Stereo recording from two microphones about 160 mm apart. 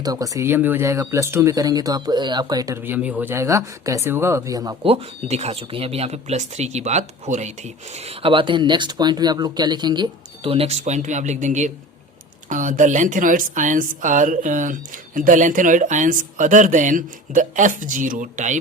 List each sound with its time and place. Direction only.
0.0 s speech: 25° right (ahead or behind)
2.8 s speech: 10° right (ahead or behind)
4.8 s a woman's voice: 35° right (ahead or behind)